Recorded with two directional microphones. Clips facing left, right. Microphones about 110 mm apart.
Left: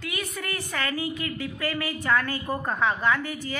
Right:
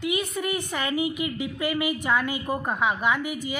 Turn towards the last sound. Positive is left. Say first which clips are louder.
# even
turn(degrees=-15)  # may be behind; listen again after turning